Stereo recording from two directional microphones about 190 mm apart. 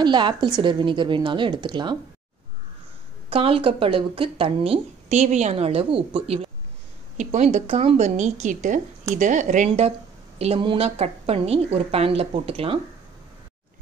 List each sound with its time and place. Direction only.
0.0 s speech: 25° right (ahead or behind)
3.3 s a woman's voice: 30° right (ahead or behind)